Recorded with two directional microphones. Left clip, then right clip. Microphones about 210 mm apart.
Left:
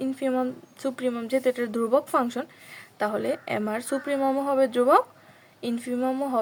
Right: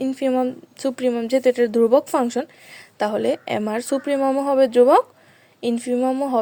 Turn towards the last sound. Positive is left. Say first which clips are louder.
# right 6 dB
turn(degrees=-25)  # may be behind; listen again after turning